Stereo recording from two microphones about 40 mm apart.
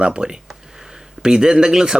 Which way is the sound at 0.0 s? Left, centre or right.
Centre.